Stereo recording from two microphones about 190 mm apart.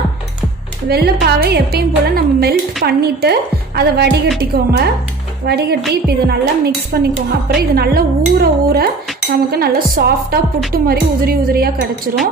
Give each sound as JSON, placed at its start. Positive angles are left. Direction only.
{"t": 0.8, "sound": "speech", "side_deg": -55}
{"t": 5.4, "sound": "a woman's voice", "side_deg": -55}